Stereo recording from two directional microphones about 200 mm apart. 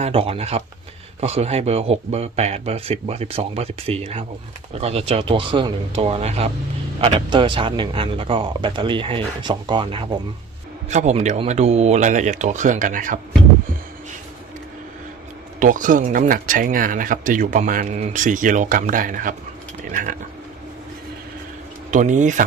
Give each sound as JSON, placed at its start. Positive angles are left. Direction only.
{"t": 0.0, "sound": "speech", "side_deg": -30}
{"t": 15.6, "sound": "speech", "side_deg": -40}
{"t": 19.9, "sound": "cutlery", "side_deg": -40}
{"t": 21.9, "sound": "speech", "side_deg": -40}